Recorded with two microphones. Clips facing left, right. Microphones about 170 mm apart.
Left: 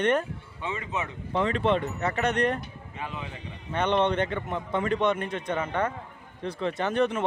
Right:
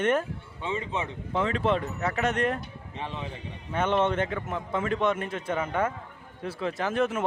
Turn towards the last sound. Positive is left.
turn(degrees=-5)  # may be behind; listen again after turning